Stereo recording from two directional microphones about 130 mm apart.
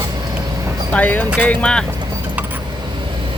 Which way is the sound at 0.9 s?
15° left (ahead or behind).